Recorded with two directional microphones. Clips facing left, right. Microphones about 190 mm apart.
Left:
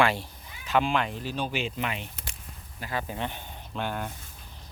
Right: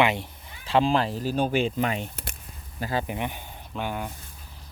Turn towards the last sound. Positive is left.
turn(degrees=-10)  # may be behind; listen again after turning